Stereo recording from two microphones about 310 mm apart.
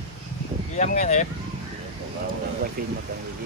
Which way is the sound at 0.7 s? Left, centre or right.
Left.